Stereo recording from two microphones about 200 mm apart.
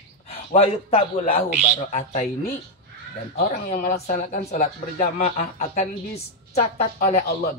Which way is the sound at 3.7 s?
40° left (ahead or behind).